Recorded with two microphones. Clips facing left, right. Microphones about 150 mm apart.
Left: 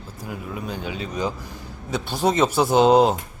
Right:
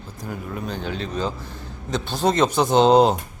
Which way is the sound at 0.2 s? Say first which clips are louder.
Right 1 dB; 5° left (ahead or behind).